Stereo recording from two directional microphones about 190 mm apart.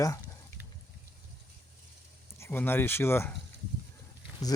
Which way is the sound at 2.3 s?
10° left (ahead or behind).